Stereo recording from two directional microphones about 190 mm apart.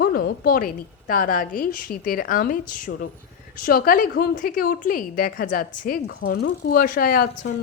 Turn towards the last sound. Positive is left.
turn(degrees=50)  # may be behind; listen again after turning